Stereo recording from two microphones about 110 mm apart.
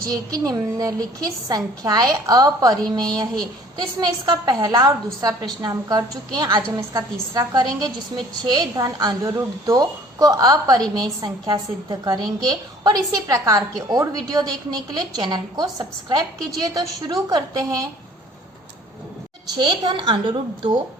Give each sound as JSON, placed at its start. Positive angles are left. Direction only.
{"t": 0.1, "sound": "a woman's voice", "side_deg": -35}
{"t": 19.5, "sound": "a woman's voice", "side_deg": -40}